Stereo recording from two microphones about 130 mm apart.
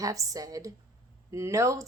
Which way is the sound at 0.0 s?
25° right (ahead or behind).